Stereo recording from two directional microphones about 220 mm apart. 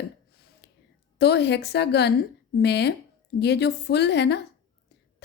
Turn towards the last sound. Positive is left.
turn(degrees=50)  # may be behind; listen again after turning